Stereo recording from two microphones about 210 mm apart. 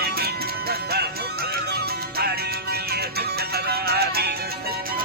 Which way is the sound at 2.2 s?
50° right (ahead or behind).